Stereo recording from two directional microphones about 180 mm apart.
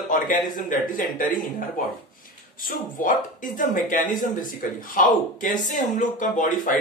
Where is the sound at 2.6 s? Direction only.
50° left (ahead or behind).